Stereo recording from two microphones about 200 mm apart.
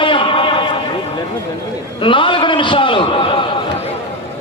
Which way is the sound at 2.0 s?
25° left (ahead or behind).